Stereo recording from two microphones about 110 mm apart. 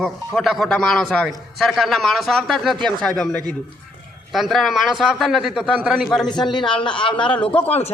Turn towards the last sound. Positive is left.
turn(degrees=50)  # may be behind; listen again after turning